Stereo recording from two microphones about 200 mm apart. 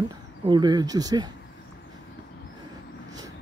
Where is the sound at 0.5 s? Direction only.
20° right (ahead or behind).